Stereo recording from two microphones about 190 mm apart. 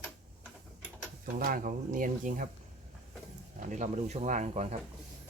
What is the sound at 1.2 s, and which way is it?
Speech, 50° right (ahead or behind).